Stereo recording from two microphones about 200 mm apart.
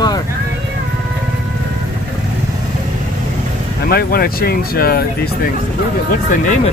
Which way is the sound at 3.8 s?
50° left (ahead or behind).